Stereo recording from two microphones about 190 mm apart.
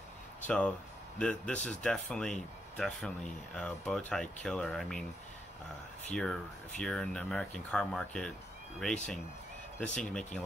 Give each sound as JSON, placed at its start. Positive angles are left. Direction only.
{"t": 0.4, "sound": "speech", "side_deg": 5}
{"t": 6.8, "sound": "speech", "side_deg": 5}